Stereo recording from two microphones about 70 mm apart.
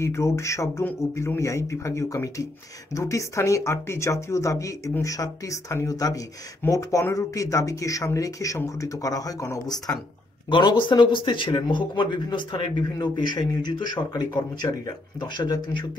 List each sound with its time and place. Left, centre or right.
0.0 s speech: left
10.6 s speech: left